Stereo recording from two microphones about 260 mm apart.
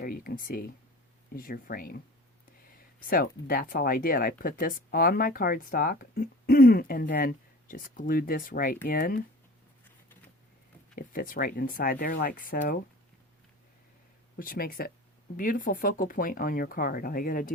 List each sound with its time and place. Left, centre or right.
0.0 s speech: left
10.9 s speech: left
14.3 s speech: left